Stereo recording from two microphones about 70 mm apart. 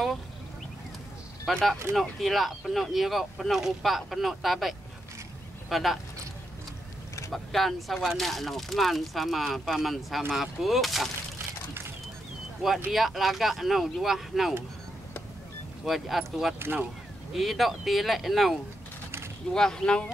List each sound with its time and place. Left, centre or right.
1.5 s speech: centre
7.3 s speech: centre
12.6 s speech: centre
15.8 s speech: centre
16.5 s speech: right
17.3 s speech: centre